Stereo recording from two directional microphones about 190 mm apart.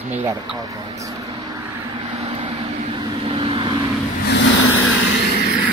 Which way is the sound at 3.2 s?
30° right (ahead or behind).